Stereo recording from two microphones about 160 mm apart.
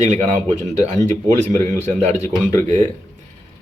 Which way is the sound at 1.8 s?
50° right (ahead or behind).